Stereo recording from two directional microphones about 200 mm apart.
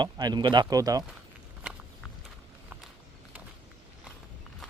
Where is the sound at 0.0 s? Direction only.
20° right (ahead or behind).